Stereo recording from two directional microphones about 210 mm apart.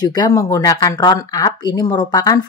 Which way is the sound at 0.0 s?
20° left (ahead or behind).